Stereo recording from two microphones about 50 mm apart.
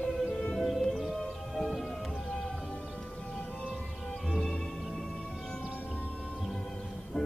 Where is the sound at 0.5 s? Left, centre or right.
Centre.